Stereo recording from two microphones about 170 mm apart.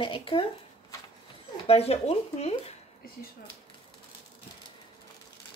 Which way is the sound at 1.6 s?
35° left (ahead or behind).